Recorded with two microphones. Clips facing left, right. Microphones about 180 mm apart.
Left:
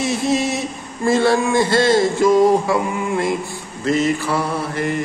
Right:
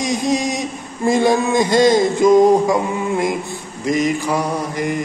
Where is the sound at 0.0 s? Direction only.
15° right (ahead or behind).